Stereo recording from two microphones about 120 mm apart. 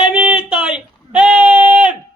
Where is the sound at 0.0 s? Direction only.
10° right (ahead or behind).